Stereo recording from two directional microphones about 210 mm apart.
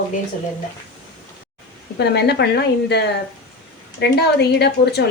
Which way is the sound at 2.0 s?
50° left (ahead or behind).